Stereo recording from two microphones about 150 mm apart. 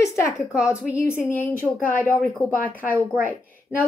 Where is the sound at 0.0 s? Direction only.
20° left (ahead or behind).